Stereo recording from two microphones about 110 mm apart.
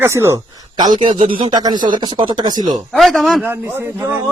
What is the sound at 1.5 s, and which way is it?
Speech, 40° right (ahead or behind).